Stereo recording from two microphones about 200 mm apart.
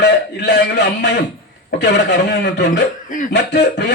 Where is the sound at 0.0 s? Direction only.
55° left (ahead or behind).